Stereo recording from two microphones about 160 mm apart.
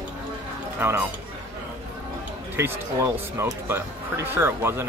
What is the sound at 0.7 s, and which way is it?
Speech, 10° right (ahead or behind).